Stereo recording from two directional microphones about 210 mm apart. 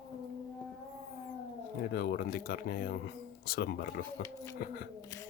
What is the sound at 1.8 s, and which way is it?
Speech, 50° left (ahead or behind).